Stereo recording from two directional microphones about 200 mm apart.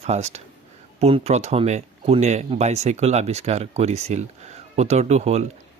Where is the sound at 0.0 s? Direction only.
35° right (ahead or behind).